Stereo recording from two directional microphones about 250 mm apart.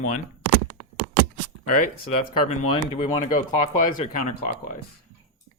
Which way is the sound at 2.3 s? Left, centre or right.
Left.